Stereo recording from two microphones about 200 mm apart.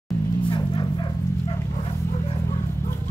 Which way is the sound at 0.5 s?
25° left (ahead or behind).